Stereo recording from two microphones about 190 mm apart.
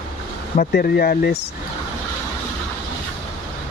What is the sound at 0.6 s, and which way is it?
Speech, 55° left (ahead or behind).